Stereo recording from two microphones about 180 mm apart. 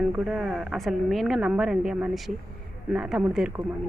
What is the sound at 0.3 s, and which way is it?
Speech, 5° right (ahead or behind).